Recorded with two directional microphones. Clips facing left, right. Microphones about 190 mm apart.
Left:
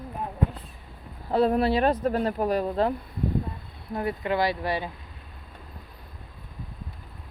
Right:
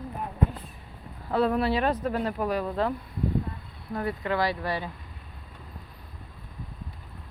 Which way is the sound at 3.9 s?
20° left (ahead or behind).